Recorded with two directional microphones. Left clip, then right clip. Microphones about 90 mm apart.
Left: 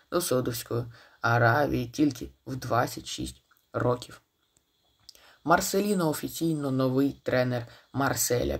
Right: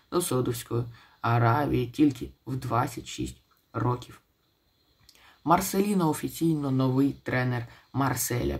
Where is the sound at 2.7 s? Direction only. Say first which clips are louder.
Left 1 dB; 45° left (ahead or behind); by 4.1 s 60° left (ahead or behind).